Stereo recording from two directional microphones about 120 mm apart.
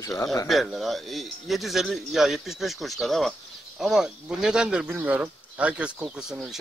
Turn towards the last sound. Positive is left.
turn(degrees=-5)  # may be behind; listen again after turning